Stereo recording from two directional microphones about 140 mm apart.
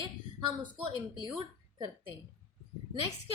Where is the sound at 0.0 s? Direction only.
35° right (ahead or behind).